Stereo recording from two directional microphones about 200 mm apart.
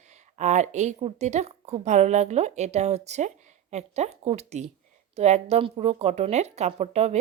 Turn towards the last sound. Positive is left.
turn(degrees=-35)  # may be behind; listen again after turning